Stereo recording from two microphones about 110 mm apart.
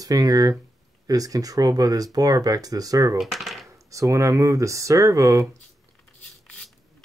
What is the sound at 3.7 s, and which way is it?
Speech, 30° right (ahead or behind).